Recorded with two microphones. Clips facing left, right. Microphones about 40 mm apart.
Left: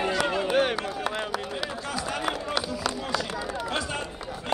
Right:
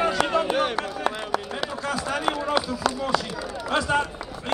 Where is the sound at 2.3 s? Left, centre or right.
Centre.